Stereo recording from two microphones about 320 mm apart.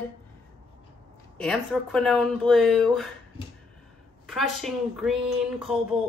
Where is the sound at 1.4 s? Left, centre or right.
Centre.